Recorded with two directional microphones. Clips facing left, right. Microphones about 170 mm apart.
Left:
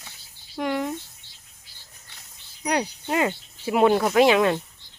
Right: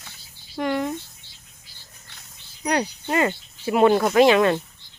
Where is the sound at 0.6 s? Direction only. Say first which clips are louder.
Right 2 dB; 5° left (ahead or behind).